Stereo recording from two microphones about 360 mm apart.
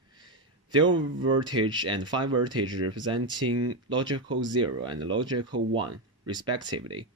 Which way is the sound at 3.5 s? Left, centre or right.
Right.